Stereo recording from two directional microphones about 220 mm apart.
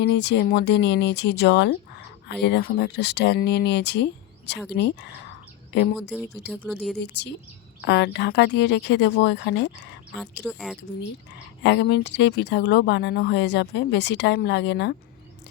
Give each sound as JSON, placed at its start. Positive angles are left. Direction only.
{"t": 0.0, "sound": "speech", "side_deg": 50}
{"t": 6.4, "sound": "speech", "side_deg": 0}
{"t": 7.8, "sound": "speech", "side_deg": 50}
{"t": 10.4, "sound": "speech", "side_deg": 0}
{"t": 11.6, "sound": "speech", "side_deg": 55}